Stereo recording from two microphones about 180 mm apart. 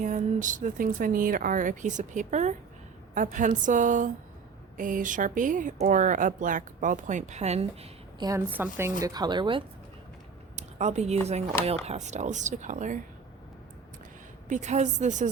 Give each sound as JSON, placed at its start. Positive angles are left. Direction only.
{"t": 0.0, "sound": "speech", "side_deg": -45}
{"t": 8.2, "sound": "a woman's voice", "side_deg": -15}
{"t": 10.5, "sound": "a sound", "side_deg": -40}
{"t": 11.3, "sound": "speech", "side_deg": -35}
{"t": 14.5, "sound": "speech", "side_deg": -40}